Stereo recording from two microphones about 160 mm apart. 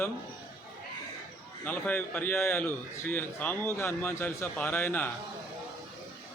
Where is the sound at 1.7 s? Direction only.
10° left (ahead or behind).